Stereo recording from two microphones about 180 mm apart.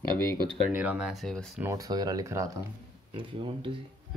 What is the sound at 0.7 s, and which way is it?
Speech, 10° right (ahead or behind).